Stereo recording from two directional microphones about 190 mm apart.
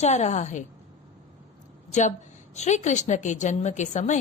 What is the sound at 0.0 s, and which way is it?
Speech, 35° left (ahead or behind).